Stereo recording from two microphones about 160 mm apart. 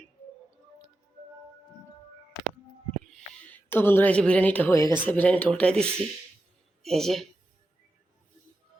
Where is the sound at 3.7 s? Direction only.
15° left (ahead or behind).